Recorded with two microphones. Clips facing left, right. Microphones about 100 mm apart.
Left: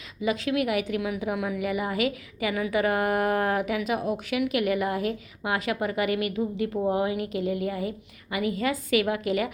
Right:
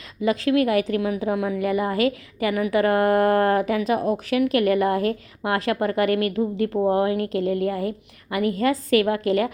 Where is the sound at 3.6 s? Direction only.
40° right (ahead or behind).